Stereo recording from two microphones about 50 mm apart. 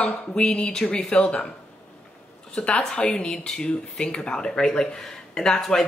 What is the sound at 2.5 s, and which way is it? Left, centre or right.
Speech, centre.